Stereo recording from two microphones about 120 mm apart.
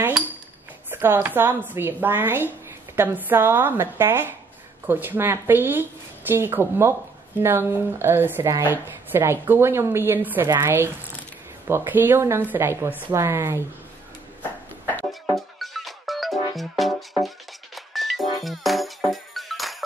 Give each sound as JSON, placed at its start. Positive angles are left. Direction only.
{"t": 0.8, "sound": "speech", "side_deg": -15}
{"t": 15.6, "sound": "music", "side_deg": 0}